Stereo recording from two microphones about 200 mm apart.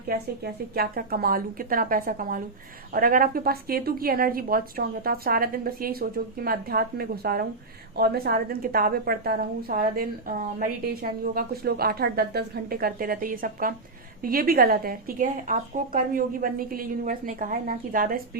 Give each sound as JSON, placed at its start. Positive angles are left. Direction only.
{"t": 0.1, "sound": "a woman's voice", "side_deg": -50}